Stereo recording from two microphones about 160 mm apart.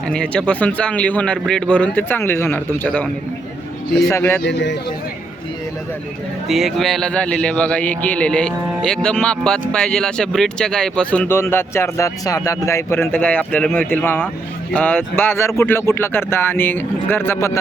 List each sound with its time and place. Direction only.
0.1 s speech: 5° left (ahead or behind)
4.1 s speech: 15° left (ahead or behind)
4.4 s speech: 90° left
6.5 s speech: centre (ahead or behind); by 17.6 s 15° left (ahead or behind)